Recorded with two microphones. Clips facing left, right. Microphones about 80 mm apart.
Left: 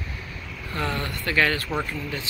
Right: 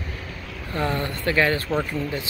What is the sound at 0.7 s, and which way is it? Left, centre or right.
Speech, right.